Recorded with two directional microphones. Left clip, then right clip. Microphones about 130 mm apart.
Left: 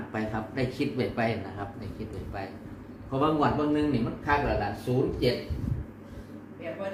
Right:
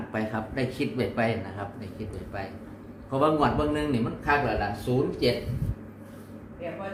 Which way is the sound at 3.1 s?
30° right (ahead or behind).